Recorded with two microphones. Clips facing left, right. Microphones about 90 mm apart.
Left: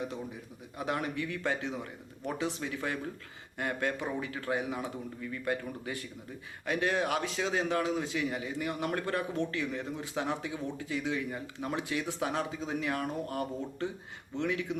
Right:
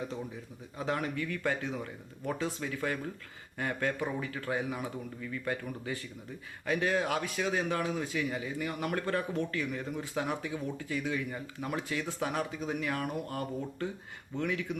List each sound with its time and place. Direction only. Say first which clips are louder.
0.8 s a man's voice: even; 20° left (ahead or behind)